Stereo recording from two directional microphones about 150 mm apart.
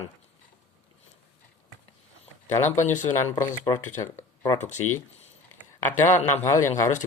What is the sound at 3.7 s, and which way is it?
Speech, 30° left (ahead or behind).